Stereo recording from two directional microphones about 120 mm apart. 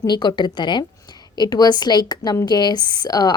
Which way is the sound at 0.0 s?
40° left (ahead or behind).